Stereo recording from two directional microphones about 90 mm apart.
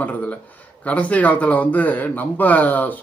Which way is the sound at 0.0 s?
15° left (ahead or behind).